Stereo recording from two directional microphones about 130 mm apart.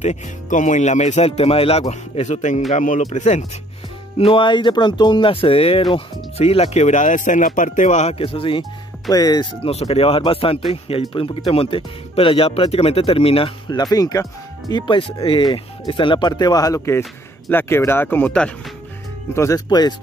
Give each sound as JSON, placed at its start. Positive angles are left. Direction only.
{"t": 0.0, "sound": "speech", "side_deg": 70}
{"t": 4.2, "sound": "speech", "side_deg": 40}
{"t": 9.1, "sound": "speech", "side_deg": 30}
{"t": 9.6, "sound": "speech", "side_deg": 50}
{"t": 13.7, "sound": "speech", "side_deg": 30}
{"t": 19.3, "sound": "speech", "side_deg": 25}